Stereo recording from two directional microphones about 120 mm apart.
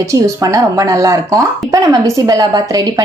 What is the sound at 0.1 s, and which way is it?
Speech, 30° right (ahead or behind).